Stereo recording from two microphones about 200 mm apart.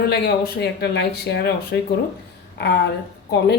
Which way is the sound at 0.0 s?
50° left (ahead or behind).